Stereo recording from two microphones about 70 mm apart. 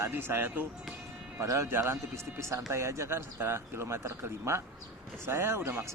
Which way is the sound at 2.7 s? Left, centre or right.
Right.